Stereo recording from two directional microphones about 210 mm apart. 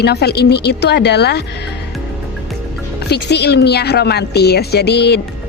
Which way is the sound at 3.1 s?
50° left (ahead or behind).